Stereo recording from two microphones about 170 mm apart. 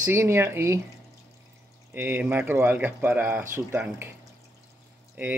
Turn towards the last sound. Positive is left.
turn(degrees=-10)  # may be behind; listen again after turning